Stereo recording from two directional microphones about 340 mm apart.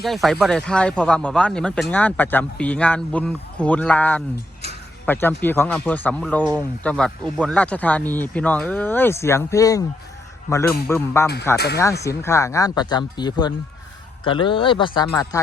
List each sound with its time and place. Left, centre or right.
0.0 s speech: centre
10.8 s speech: centre
11.5 s speech: left
12.0 s speech: centre